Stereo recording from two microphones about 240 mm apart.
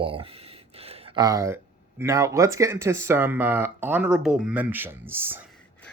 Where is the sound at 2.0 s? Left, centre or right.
Centre.